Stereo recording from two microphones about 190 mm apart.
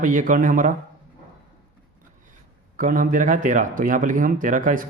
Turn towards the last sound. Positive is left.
turn(degrees=-45)  # may be behind; listen again after turning